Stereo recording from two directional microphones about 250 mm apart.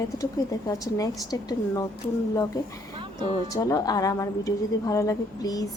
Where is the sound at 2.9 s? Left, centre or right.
Centre.